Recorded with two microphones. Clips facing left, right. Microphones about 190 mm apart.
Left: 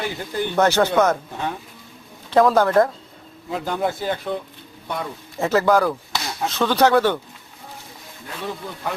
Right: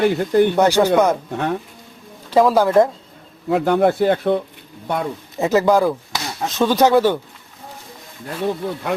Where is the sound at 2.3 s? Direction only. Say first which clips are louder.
Right 2 dB; 10° right (ahead or behind).